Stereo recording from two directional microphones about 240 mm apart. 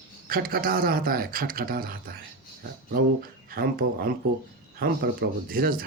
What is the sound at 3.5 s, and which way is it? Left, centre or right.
Speech, right.